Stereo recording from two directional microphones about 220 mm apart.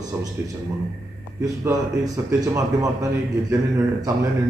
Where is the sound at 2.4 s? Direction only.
15° right (ahead or behind).